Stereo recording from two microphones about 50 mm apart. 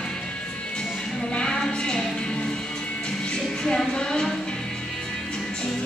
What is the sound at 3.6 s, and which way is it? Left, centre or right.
Music, centre.